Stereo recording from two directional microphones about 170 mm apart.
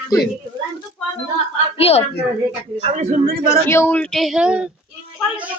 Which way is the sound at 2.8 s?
40° right (ahead or behind).